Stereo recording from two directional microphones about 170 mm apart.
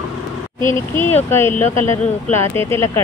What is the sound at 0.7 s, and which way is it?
Speech, 15° left (ahead or behind).